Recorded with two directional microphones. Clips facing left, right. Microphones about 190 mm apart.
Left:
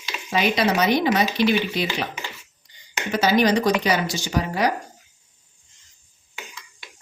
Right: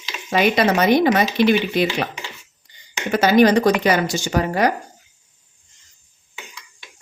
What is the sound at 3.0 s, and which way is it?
Speech, 55° right (ahead or behind).